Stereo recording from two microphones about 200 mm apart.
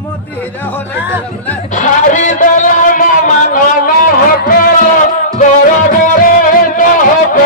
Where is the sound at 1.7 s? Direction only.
40° left (ahead or behind).